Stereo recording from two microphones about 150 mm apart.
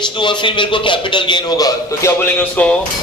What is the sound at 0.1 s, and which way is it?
A man's voice, 30° left (ahead or behind).